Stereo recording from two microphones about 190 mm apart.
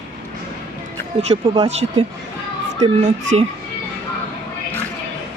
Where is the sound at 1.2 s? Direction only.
30° right (ahead or behind).